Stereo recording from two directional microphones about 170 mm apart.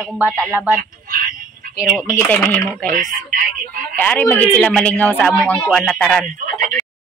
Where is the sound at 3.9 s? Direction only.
10° left (ahead or behind).